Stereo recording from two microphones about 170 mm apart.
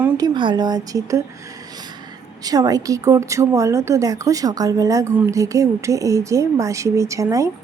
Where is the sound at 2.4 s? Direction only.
20° right (ahead or behind).